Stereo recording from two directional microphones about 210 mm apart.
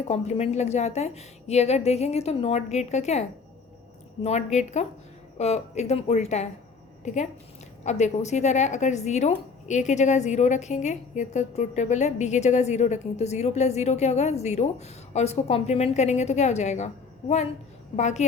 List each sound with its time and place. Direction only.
0.1 s a woman's voice: 30° left (ahead or behind)